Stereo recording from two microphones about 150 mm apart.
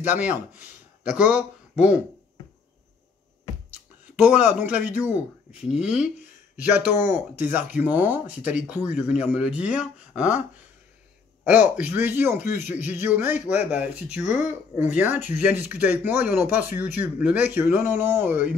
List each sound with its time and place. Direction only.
0.0 s speech: 10° right (ahead or behind)
4.2 s speech: 10° right (ahead or behind)
11.4 s speech: 10° right (ahead or behind)
14.2 s speech: 50° left (ahead or behind)
14.8 s speech: 10° right (ahead or behind)